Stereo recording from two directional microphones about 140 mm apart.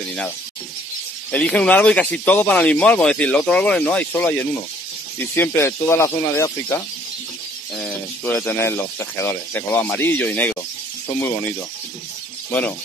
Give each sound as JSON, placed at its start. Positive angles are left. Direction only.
{"t": 1.3, "sound": "speech", "side_deg": 10}
{"t": 7.7, "sound": "speech", "side_deg": 5}